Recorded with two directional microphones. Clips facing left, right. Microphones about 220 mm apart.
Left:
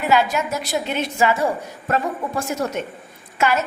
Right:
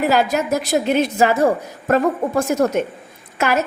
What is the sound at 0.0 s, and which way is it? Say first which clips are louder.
A woman's voice: right 2 dB; 40° right (ahead or behind).